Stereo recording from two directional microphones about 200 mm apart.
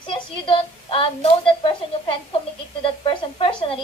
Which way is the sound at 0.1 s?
25° left (ahead or behind).